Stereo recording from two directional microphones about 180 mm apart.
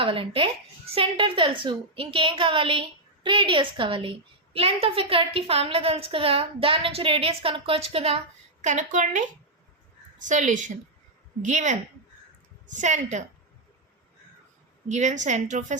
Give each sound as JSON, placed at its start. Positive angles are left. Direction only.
{"t": 0.0, "sound": "a woman's voice", "side_deg": -30}
{"t": 14.8, "sound": "a woman's voice", "side_deg": -40}